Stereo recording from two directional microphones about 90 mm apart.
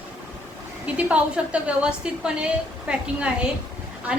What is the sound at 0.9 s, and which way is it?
A woman's voice, 15° right (ahead or behind).